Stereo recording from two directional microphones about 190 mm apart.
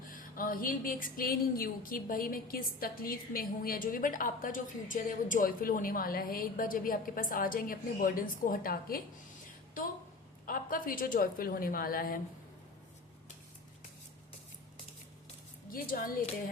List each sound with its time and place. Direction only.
0.1 s speech: 45° left (ahead or behind)
10.4 s speech: 45° left (ahead or behind)
15.7 s speech: 50° left (ahead or behind)